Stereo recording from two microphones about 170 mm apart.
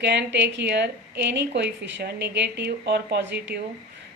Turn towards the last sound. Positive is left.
turn(degrees=-65)  # may be behind; listen again after turning